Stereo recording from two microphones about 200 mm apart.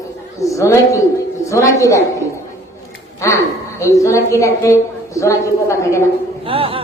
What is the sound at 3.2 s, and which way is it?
A woman's voice, 15° left (ahead or behind).